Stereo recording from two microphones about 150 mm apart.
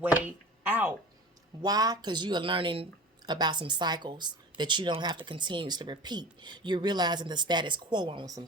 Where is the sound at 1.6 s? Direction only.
25° right (ahead or behind).